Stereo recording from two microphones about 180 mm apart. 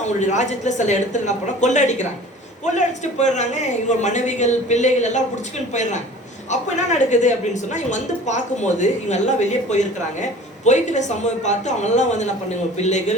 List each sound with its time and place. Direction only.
0.0 s speech: 40° left (ahead or behind)